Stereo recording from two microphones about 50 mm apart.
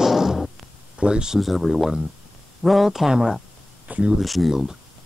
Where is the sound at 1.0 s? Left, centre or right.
Centre.